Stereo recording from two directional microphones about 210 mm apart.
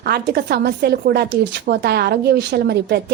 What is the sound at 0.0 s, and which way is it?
A woman's voice, 50° right (ahead or behind).